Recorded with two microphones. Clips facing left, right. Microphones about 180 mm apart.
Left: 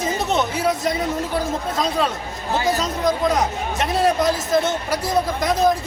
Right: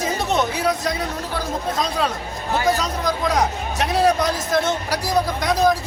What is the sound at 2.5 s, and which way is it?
Speech, 25° left (ahead or behind).